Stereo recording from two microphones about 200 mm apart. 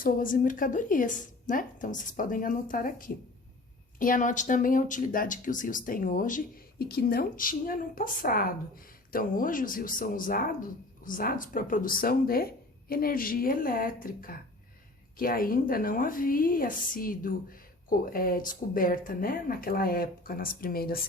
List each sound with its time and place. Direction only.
0.0 s a woman's voice: 45° left (ahead or behind)